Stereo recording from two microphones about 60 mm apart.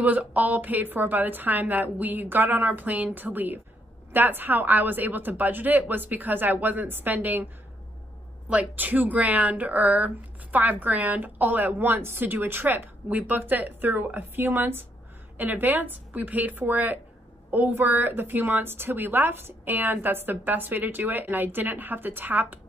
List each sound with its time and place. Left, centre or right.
0.0 s speech: right
8.5 s speech: right